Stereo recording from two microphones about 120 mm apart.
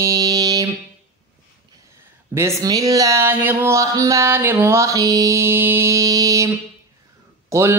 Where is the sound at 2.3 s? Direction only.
25° right (ahead or behind).